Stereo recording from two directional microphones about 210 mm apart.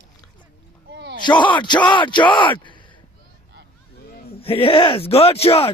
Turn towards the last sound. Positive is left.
turn(degrees=30)  # may be behind; listen again after turning